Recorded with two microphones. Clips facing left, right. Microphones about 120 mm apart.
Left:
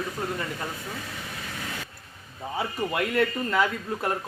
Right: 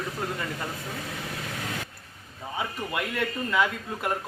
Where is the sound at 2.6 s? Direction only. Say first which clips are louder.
Left 3 dB; 35° left (ahead or behind).